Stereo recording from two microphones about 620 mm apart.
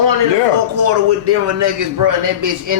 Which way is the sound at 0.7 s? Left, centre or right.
Right.